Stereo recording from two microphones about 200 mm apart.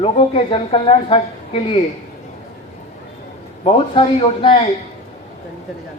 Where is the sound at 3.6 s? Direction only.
25° left (ahead or behind).